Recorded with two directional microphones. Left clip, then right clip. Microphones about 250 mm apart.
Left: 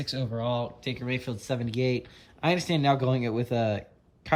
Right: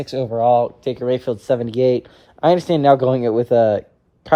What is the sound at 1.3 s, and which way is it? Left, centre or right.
Speech, centre.